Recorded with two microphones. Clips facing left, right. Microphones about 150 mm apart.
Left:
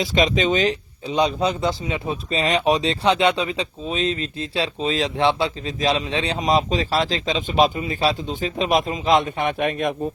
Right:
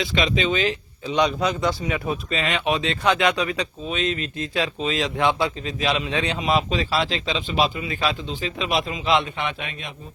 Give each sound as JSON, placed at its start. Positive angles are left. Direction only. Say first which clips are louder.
{"t": 0.0, "sound": "a man's voice", "louder": "left 3 dB", "side_deg": 40}